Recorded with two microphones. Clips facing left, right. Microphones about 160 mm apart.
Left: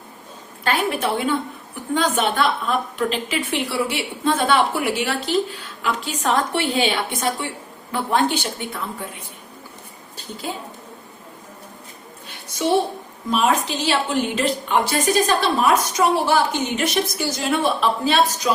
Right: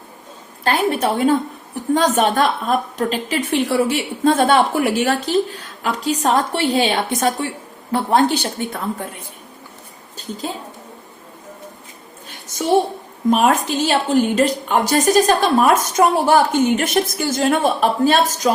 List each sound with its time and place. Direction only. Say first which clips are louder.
0.6 s a woman's voice: right 4 dB; 40° right (ahead or behind)
13.3 s a woman's voice: right 3 dB; 50° right (ahead or behind)